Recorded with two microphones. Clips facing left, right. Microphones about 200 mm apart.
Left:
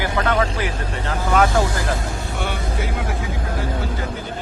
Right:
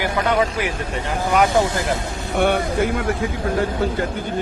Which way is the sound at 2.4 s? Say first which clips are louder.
Right 11 dB; 55° right (ahead or behind).